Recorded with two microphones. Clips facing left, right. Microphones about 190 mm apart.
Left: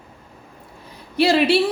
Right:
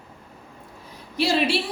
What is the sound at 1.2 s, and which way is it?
Speech, 65° left (ahead or behind).